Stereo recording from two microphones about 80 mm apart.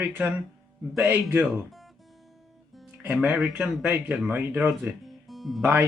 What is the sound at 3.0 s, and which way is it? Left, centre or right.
Speech, centre.